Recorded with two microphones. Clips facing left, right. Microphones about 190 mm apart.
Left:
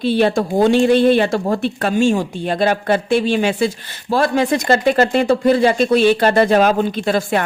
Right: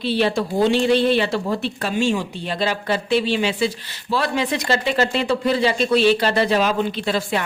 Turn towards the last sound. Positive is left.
turn(degrees=50)  # may be behind; listen again after turning